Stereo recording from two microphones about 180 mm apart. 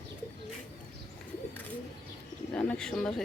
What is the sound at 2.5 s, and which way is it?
Bird, 5° left (ahead or behind).